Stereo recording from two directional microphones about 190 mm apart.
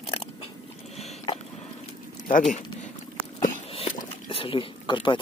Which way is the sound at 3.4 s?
35° left (ahead or behind).